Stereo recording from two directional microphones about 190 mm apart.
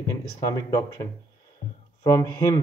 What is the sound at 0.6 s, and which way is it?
Speech, 20° left (ahead or behind).